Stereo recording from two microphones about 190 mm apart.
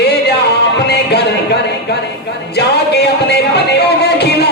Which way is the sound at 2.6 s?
60° left (ahead or behind).